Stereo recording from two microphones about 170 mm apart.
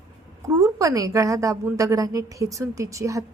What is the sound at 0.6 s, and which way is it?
A woman's voice, 20° right (ahead or behind).